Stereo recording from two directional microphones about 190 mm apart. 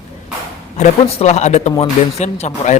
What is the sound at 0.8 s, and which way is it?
Speech, 35° left (ahead or behind).